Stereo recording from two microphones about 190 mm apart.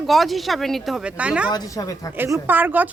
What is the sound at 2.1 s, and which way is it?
Speech, 10° right (ahead or behind).